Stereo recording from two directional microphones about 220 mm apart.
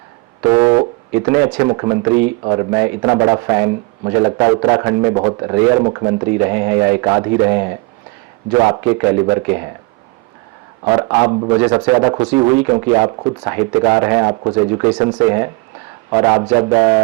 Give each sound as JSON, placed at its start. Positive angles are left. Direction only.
{"t": 0.4, "sound": "music", "side_deg": -10}
{"t": 1.7, "sound": "a man's voice", "side_deg": -20}
{"t": 8.7, "sound": "a man's voice", "side_deg": -15}
{"t": 10.8, "sound": "a man's voice", "side_deg": -10}
{"t": 11.3, "sound": "speech", "side_deg": -20}
{"t": 11.6, "sound": "a man's voice", "side_deg": -10}